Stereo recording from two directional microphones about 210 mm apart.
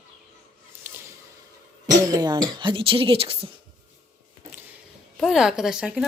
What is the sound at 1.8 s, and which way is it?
Speech, 20° right (ahead or behind).